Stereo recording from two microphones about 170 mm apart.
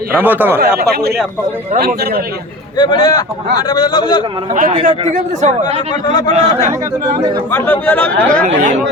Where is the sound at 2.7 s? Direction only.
25° left (ahead or behind).